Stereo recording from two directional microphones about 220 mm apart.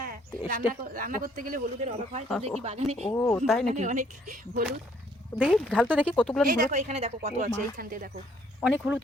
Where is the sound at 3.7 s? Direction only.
35° right (ahead or behind).